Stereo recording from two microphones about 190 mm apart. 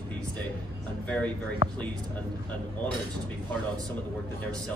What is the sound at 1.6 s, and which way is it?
Speech, 40° right (ahead or behind).